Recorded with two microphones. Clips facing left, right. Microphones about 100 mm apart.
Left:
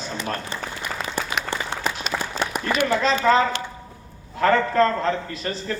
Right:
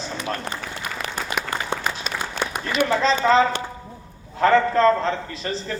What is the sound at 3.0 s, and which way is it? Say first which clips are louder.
A man's voice: right 2 dB; 30° right (ahead or behind).